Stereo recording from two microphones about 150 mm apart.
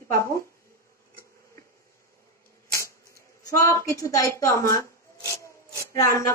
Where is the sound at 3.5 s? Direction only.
20° left (ahead or behind).